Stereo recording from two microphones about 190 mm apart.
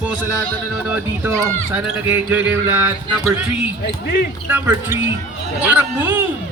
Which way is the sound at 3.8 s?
55° left (ahead or behind).